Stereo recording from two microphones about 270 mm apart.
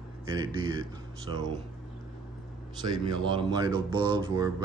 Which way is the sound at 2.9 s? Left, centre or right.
Centre.